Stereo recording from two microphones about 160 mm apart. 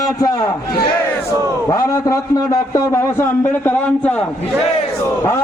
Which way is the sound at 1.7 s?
20° left (ahead or behind).